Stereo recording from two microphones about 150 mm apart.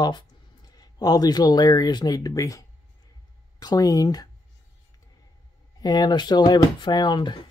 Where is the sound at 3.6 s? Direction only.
25° left (ahead or behind).